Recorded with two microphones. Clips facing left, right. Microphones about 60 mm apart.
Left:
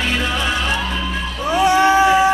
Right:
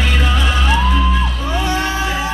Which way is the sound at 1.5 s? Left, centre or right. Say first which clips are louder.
Left 8 dB; left.